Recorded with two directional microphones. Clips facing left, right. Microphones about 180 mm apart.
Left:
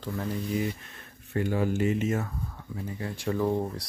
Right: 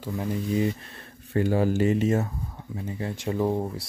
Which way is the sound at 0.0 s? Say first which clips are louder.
Right 3 dB; 15° right (ahead or behind).